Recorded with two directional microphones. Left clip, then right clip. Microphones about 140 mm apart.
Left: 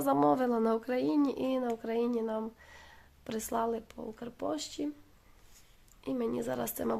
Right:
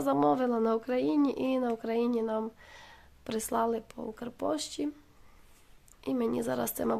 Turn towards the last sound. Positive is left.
turn(degrees=-25)  # may be behind; listen again after turning